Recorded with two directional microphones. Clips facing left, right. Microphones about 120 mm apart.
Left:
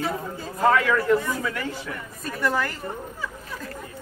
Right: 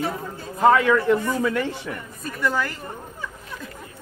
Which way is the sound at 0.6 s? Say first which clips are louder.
Right 3 dB; 25° right (ahead or behind).